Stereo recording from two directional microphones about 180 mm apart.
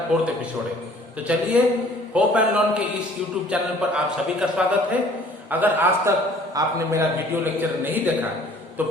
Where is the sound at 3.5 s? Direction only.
5° right (ahead or behind).